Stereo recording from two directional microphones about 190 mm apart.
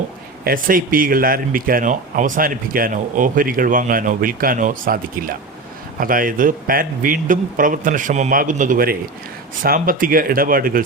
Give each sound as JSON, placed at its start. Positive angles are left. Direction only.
{"t": 0.4, "sound": "speech", "side_deg": -50}